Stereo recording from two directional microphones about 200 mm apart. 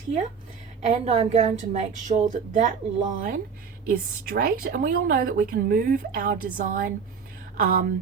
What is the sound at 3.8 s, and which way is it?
A woman's voice, 45° right (ahead or behind).